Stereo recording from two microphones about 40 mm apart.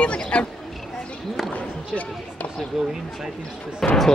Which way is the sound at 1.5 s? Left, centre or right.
Left.